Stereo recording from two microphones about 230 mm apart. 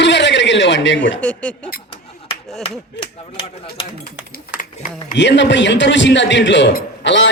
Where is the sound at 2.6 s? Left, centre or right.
Left.